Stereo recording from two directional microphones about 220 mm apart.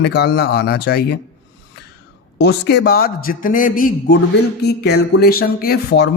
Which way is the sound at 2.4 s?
50° left (ahead or behind).